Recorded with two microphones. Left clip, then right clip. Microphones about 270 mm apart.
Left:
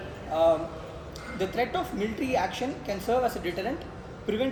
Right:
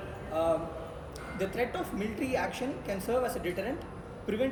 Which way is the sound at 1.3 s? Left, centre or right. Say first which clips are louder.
Left 4 dB; centre.